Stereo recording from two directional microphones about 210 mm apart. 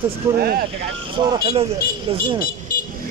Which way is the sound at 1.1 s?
25° right (ahead or behind).